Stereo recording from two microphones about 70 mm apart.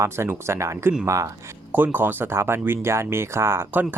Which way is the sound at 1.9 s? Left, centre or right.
Right.